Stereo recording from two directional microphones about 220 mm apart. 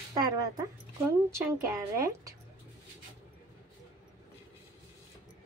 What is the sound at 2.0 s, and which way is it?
Speech, 15° right (ahead or behind).